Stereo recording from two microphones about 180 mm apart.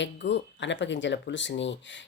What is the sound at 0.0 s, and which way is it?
Speech, 80° left.